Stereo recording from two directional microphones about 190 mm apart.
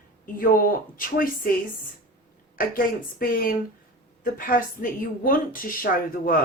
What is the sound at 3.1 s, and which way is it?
A woman's voice, 50° left (ahead or behind).